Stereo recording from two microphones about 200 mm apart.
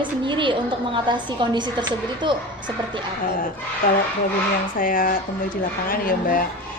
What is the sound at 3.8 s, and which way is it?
Speech, 45° left (ahead or behind).